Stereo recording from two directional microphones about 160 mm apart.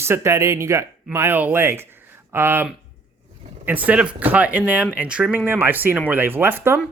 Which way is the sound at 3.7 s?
10° right (ahead or behind).